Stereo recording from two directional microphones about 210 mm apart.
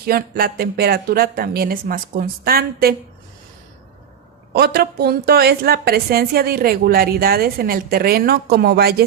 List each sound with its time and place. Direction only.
0.0 s a woman's voice: 45° right (ahead or behind)
4.5 s a woman's voice: 50° right (ahead or behind)